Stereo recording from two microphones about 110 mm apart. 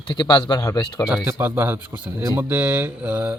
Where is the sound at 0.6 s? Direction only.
25° left (ahead or behind).